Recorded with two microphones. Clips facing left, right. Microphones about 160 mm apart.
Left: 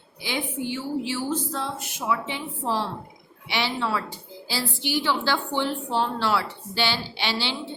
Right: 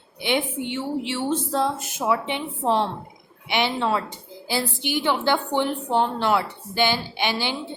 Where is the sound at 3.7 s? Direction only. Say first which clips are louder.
Right 4 dB; 20° right (ahead or behind).